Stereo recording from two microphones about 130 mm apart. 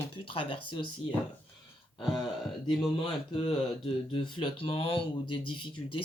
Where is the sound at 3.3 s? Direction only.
45° left (ahead or behind).